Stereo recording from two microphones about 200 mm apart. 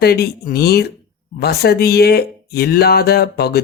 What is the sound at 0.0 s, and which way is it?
Speech, 55° left (ahead or behind).